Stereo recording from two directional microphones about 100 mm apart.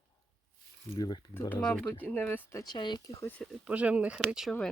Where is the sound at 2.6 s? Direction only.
50° left (ahead or behind).